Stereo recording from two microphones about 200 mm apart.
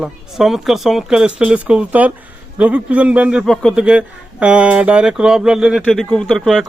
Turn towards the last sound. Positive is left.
turn(degrees=0)  # may be behind; listen again after turning